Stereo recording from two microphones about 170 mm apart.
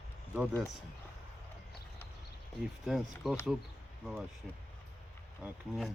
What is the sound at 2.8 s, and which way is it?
Speech, centre (ahead or behind).